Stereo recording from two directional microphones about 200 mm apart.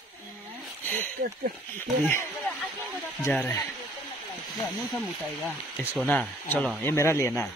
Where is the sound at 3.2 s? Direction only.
10° left (ahead or behind).